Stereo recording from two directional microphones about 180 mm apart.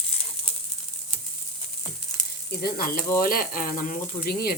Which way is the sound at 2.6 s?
55° left (ahead or behind).